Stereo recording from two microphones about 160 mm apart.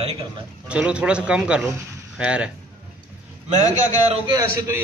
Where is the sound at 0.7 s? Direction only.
5° right (ahead or behind).